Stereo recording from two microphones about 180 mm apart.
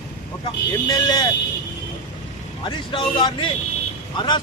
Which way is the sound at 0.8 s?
25° left (ahead or behind).